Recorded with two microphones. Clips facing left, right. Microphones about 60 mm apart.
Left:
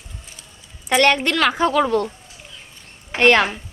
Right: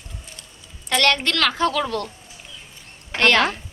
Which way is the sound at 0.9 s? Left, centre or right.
Centre.